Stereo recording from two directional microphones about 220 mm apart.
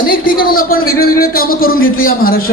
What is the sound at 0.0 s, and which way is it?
A woman's voice, 40° left (ahead or behind).